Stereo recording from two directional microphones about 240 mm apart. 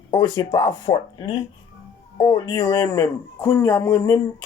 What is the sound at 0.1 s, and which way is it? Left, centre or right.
Speech, centre.